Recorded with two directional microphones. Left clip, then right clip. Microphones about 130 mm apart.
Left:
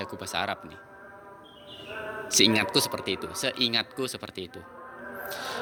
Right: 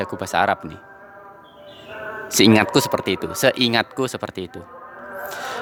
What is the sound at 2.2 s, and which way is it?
A man's voice, 55° right (ahead or behind).